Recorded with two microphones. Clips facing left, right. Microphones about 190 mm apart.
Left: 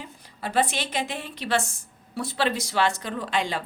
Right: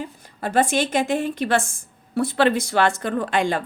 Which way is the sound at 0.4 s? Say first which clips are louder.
Right 5 dB; 50° right (ahead or behind).